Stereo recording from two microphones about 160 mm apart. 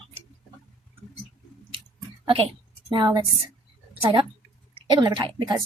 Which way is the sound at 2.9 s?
25° right (ahead or behind).